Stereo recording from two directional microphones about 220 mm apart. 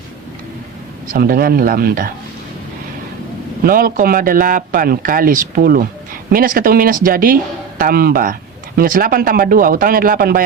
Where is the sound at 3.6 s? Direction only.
40° right (ahead or behind).